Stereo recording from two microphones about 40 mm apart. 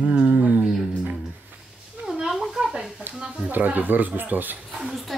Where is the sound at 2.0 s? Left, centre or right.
Centre.